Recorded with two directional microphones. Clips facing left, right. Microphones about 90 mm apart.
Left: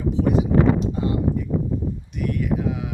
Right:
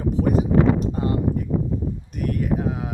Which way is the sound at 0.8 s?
45° right (ahead or behind).